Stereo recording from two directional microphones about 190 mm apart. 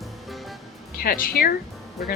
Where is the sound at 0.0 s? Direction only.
Centre (ahead or behind).